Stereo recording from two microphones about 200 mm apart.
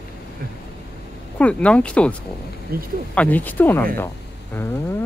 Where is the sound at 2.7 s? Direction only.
50° right (ahead or behind).